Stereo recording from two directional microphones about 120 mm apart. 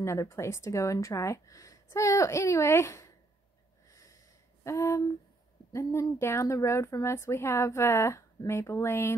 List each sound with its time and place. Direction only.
0.0 s speech: 25° left (ahead or behind)
3.9 s snort: 25° left (ahead or behind)
4.6 s speech: 25° left (ahead or behind)